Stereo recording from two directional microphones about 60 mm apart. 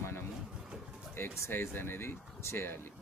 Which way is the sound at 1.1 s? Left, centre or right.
Left.